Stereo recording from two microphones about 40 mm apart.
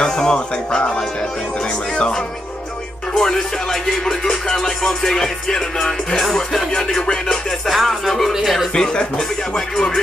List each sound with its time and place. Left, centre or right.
0.0 s music: centre
3.2 s music: centre
8.7 s music: centre